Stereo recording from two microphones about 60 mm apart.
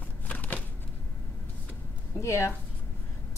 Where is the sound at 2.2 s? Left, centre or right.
Left.